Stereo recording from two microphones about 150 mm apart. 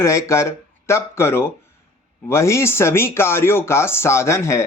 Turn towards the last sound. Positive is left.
turn(degrees=20)  # may be behind; listen again after turning